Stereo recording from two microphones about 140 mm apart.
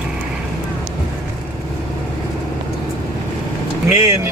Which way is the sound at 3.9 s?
20° right (ahead or behind).